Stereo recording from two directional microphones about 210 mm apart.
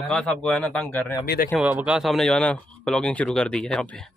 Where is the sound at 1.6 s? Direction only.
5° right (ahead or behind).